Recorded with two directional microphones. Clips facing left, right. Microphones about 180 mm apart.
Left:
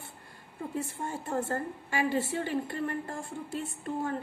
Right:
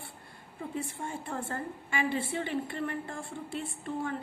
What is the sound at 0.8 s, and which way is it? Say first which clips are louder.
A woman's voice: left 2 dB; 40° left (ahead or behind).